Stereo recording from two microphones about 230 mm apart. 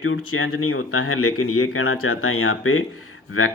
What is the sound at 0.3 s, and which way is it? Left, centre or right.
Speech, left.